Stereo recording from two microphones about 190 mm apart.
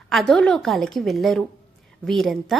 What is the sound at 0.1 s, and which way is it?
A woman's voice, centre (ahead or behind).